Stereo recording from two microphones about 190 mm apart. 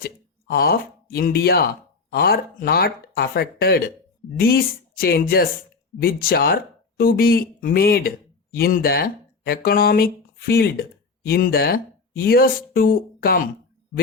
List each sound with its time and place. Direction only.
0.0 s speech: 55° left (ahead or behind)